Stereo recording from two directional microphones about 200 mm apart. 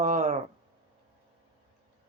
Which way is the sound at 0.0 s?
35° right (ahead or behind).